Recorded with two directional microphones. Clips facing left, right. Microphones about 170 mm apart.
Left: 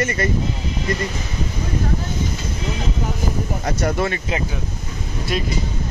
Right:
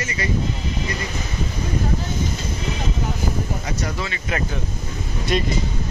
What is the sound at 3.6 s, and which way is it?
Speech, 55° left (ahead or behind).